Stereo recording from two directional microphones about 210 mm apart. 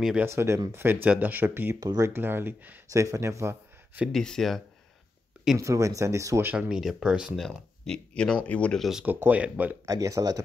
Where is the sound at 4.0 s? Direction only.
Centre (ahead or behind).